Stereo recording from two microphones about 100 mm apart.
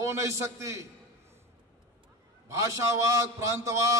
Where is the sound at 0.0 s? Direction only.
30° right (ahead or behind).